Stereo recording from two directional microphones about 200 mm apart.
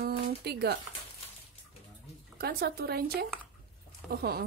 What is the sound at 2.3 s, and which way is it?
A woman's voice, 50° right (ahead or behind).